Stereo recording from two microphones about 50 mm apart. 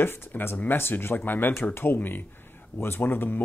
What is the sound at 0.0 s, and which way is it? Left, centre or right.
Speech, left.